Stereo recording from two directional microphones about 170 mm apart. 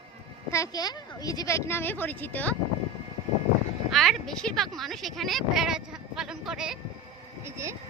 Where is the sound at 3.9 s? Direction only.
Centre (ahead or behind).